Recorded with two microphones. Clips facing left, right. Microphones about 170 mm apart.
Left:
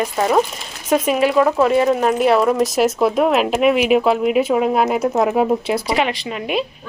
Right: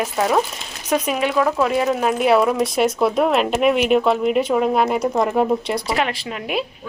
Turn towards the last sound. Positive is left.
turn(degrees=0)  # may be behind; listen again after turning